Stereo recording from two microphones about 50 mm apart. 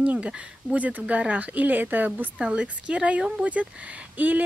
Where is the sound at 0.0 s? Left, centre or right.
Right.